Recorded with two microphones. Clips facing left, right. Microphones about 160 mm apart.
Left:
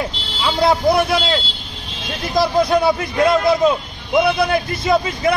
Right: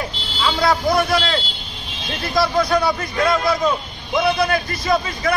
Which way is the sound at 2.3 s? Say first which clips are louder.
Left 2 dB; 25° left (ahead or behind).